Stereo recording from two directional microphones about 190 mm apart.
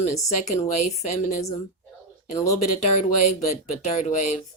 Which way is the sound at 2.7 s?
40° left (ahead or behind).